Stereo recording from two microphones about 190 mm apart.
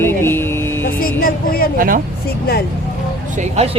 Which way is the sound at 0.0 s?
10° left (ahead or behind).